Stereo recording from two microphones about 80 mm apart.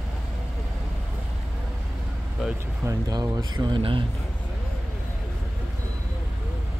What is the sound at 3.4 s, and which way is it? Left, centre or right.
Speech, right.